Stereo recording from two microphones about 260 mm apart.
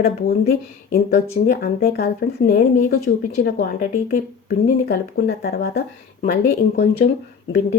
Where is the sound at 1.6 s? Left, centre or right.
Left.